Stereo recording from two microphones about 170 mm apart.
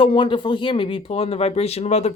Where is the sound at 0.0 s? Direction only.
30° left (ahead or behind).